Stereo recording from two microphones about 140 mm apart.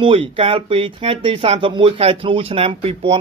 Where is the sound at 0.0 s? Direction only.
40° right (ahead or behind).